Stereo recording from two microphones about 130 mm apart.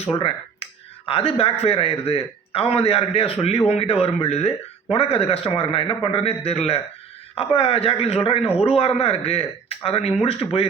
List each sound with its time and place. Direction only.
0.2 s speech: 45° left (ahead or behind)